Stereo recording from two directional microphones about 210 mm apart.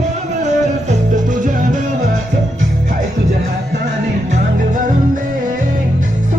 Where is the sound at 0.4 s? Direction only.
35° right (ahead or behind).